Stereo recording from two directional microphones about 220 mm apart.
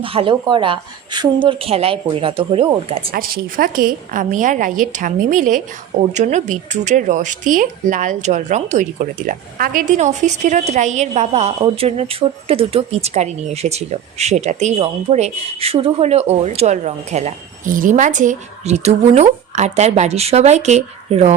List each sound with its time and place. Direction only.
0.0 s a woman's voice: 25° right (ahead or behind)
3.1 s a woman's voice: 40° right (ahead or behind)